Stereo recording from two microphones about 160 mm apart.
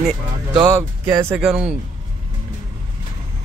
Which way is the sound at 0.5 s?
20° right (ahead or behind).